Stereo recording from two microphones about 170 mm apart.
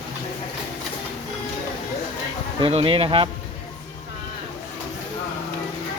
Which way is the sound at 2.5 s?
30° right (ahead or behind).